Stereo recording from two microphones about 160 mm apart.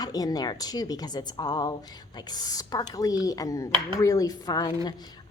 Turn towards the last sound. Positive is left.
turn(degrees=25)  # may be behind; listen again after turning